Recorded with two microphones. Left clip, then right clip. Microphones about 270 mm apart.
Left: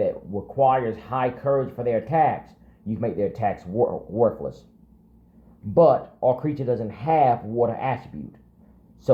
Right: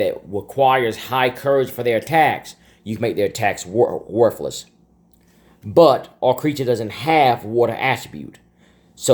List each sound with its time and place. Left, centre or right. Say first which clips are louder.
0.5 s speech: right 4 dB; right
5.7 s speech: right 4 dB; right